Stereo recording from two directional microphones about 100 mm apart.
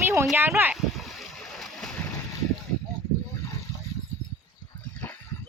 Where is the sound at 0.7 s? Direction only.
Centre (ahead or behind).